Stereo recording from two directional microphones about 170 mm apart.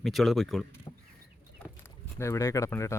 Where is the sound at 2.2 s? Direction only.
15° left (ahead or behind).